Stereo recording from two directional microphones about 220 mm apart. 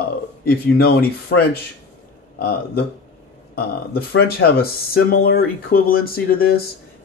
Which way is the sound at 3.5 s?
45° left (ahead or behind).